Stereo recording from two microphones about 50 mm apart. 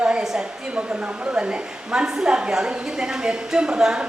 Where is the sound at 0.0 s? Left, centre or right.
Centre.